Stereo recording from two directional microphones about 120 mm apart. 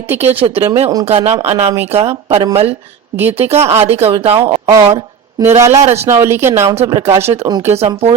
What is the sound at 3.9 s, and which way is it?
Speech, 55° right (ahead or behind).